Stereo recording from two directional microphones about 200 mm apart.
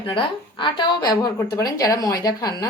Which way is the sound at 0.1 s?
25° left (ahead or behind).